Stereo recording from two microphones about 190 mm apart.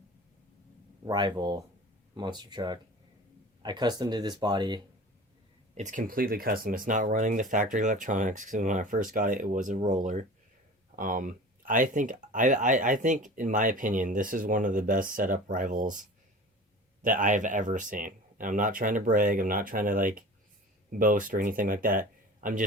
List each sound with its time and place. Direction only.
1.0 s speech: 25° right (ahead or behind)
5.7 s speech: 40° right (ahead or behind)